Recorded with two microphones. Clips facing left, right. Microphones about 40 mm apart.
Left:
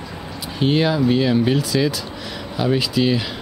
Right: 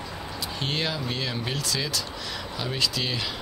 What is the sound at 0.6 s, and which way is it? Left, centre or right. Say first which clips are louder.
Speech: left 12 dB; centre.